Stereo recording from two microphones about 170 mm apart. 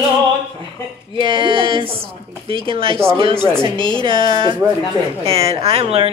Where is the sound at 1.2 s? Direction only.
30° right (ahead or behind).